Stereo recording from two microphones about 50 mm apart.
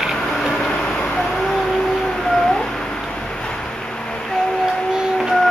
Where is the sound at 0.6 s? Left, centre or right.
Left.